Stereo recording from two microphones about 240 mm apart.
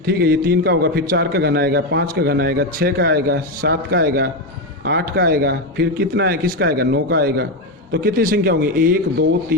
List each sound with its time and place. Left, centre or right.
0.0 s a man's voice: right